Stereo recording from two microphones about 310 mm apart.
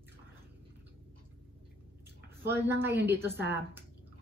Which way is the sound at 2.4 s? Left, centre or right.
Centre.